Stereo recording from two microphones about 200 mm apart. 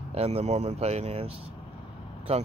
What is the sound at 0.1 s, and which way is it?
Speech, 30° right (ahead or behind).